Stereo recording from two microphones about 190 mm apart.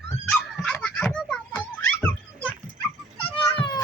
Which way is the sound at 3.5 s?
25° left (ahead or behind).